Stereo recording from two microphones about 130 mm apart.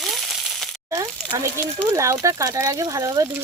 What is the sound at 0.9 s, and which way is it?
Speech, 20° right (ahead or behind).